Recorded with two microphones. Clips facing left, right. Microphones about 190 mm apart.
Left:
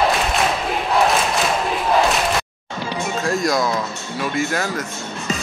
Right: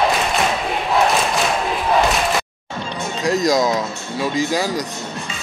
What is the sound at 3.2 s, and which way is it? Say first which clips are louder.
Speech: right 4 dB; 20° right (ahead or behind).